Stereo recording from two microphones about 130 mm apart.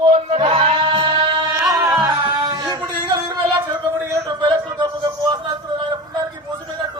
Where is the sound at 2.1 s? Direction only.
30° right (ahead or behind).